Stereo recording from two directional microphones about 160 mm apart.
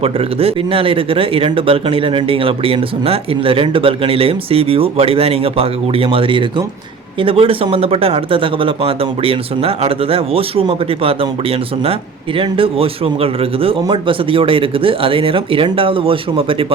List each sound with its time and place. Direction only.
0.0 s speech: 35° right (ahead or behind)